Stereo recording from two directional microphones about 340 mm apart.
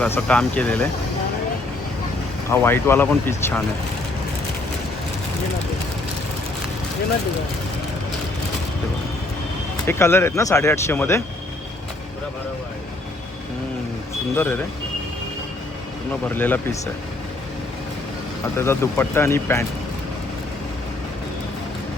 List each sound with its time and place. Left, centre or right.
0.0 s speech: centre
2.5 s speech: centre
9.8 s speech: centre
14.3 s speech: centre
16.3 s speech: centre
18.5 s speech: centre